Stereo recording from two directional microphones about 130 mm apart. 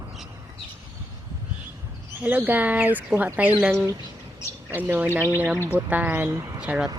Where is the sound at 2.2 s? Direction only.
15° right (ahead or behind).